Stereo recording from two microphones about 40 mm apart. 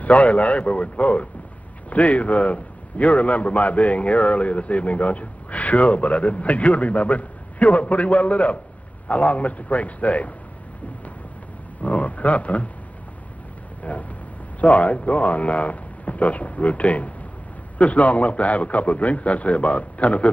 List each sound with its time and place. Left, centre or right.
0.0 s a man's voice: left
11.8 s speech: left
13.9 s a man's voice: left